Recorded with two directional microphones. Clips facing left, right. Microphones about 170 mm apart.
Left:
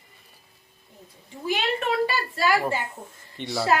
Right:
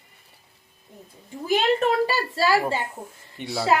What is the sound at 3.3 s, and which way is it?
Speech, 5° right (ahead or behind).